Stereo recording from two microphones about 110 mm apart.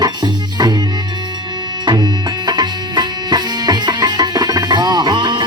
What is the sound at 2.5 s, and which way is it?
Music, 40° right (ahead or behind).